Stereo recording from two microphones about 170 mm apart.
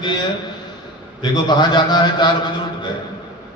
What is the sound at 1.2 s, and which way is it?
A man's voice, 25° left (ahead or behind).